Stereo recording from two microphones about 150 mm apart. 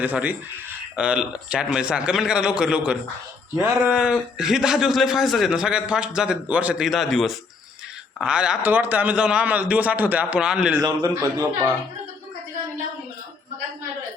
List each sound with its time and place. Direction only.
0.0 s a man's voice: 10° right (ahead or behind)
10.8 s a man's voice: 20° right (ahead or behind)